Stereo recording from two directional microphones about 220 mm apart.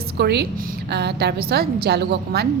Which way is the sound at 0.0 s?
45° right (ahead or behind).